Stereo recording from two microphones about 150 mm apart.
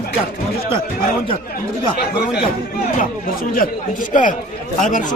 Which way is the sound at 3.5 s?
60° left (ahead or behind).